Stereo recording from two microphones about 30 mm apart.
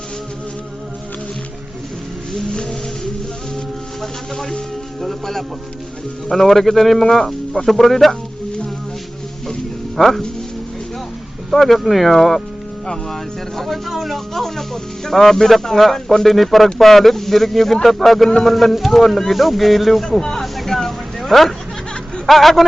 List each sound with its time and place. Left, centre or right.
2.5 s music: left
4.0 s speech: centre
10.0 s speech: centre
11.5 s speech: centre
13.7 s speech: centre
14.3 s speech: centre
20.1 s speech: centre
20.7 s vehicle: centre
21.2 s a sound: centre
22.3 s speech: centre